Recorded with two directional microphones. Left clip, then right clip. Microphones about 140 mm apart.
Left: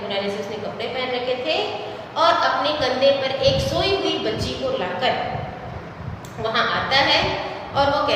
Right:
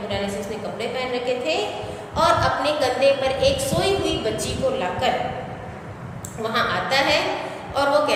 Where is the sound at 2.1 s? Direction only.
40° right (ahead or behind).